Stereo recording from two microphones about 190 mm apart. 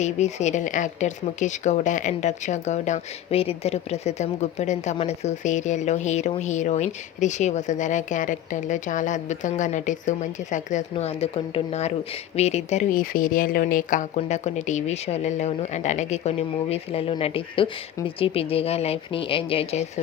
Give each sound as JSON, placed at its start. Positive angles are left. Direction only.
{"t": 0.0, "sound": "speech", "side_deg": 35}